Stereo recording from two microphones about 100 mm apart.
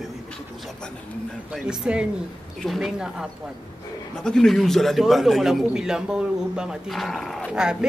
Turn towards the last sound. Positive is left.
turn(degrees=0)  # may be behind; listen again after turning